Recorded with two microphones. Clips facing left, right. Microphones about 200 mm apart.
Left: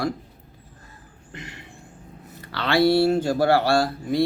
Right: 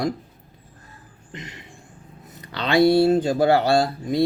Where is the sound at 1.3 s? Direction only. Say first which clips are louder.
Right 1 dB; 20° right (ahead or behind).